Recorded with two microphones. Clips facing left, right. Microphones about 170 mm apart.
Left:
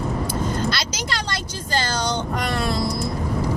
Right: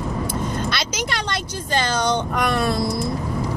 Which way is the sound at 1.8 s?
55° right (ahead or behind).